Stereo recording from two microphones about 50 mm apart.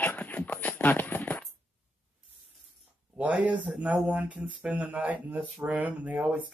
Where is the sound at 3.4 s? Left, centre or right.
Right.